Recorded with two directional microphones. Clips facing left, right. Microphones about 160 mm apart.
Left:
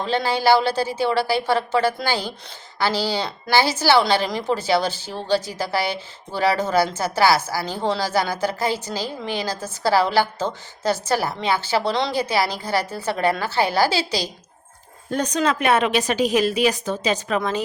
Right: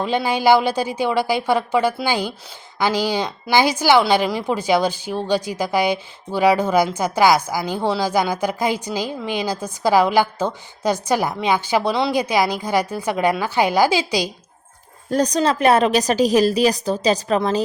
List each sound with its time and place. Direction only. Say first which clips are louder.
0.0 s a woman's voice: right 2 dB; 10° right (ahead or behind)
15.1 s a woman's voice: right 3 dB; 35° right (ahead or behind)